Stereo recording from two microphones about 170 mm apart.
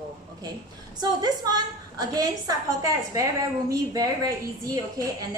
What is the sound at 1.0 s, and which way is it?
A woman's voice, 25° right (ahead or behind).